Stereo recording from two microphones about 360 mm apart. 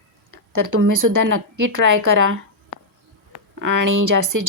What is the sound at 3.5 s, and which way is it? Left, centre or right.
Speech, right.